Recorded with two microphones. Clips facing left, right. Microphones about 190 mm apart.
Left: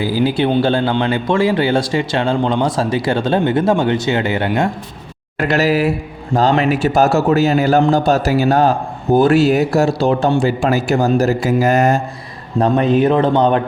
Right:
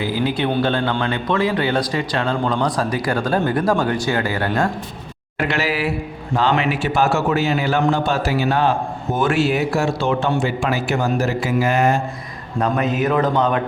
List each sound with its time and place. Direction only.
0.0 s speech: 30° left (ahead or behind)
5.4 s speech: 40° left (ahead or behind)
12.5 s speech: 30° left (ahead or behind)